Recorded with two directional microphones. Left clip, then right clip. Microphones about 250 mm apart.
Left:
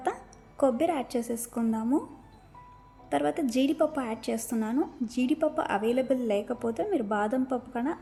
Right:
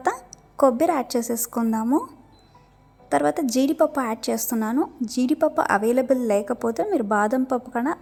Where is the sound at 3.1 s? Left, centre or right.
Centre.